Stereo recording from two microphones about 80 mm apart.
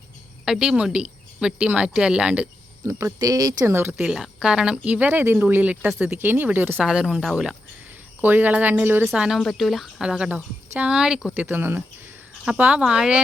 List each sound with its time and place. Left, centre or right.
0.4 s speech: centre
2.8 s speech: right
3.7 s speech: right
3.9 s speech: centre; by 6.7 s right
6.8 s speech: centre
8.2 s speech: right
9.1 s speech: centre
9.4 s speech: centre
11.3 s speech: right